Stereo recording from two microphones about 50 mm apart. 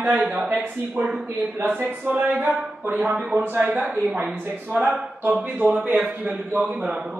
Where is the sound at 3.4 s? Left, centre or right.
Right.